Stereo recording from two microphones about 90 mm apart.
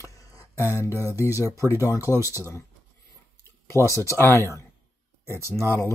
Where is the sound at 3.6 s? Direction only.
30° left (ahead or behind).